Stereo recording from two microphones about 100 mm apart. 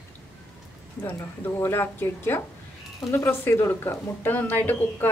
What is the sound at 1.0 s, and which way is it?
A woman's voice, 20° left (ahead or behind).